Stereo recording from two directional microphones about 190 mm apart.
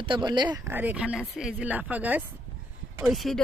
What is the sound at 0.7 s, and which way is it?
Speech, 10° right (ahead or behind).